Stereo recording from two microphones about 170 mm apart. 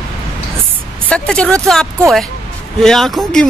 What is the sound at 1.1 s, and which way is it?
Speech, 5° left (ahead or behind).